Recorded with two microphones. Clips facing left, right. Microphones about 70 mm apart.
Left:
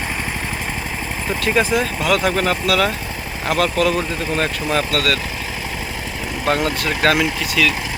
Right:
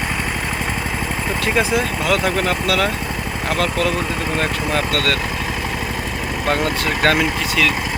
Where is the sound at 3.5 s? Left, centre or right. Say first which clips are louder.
Left 3 dB; right.